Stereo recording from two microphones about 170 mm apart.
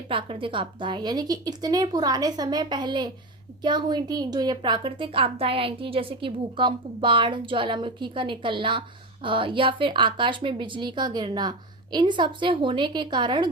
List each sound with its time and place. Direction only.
0.1 s a woman's voice: 30° right (ahead or behind)